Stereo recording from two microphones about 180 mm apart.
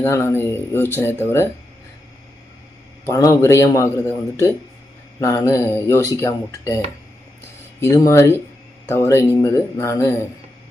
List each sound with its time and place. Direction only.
0.0 s speech: 15° left (ahead or behind)
3.1 s speech: 15° left (ahead or behind)
7.8 s speech: 15° left (ahead or behind)